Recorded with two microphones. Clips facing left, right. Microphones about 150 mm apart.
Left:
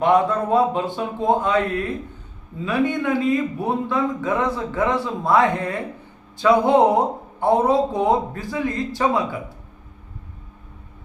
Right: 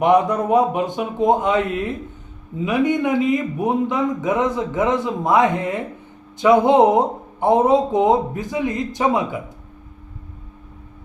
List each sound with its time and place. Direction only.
0.0 s a man's voice: 20° right (ahead or behind)